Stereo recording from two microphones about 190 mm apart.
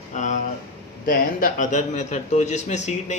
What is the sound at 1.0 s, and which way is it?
Speech, 45° left (ahead or behind).